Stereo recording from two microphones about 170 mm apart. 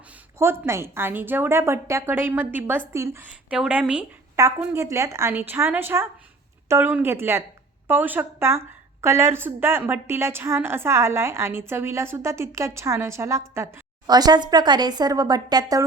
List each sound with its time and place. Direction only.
0.3 s a woman's voice: 15° right (ahead or behind)